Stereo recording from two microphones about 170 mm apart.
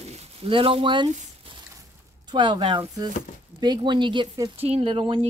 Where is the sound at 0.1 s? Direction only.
35° right (ahead or behind).